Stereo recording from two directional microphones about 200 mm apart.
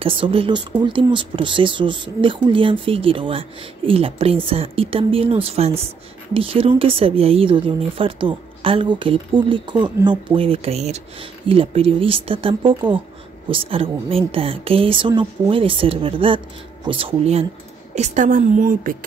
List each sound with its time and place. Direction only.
0.0 s a woman's voice: 25° right (ahead or behind); by 18.9 s 40° right (ahead or behind)